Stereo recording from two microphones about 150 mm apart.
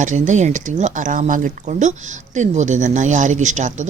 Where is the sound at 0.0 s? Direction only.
55° right (ahead or behind).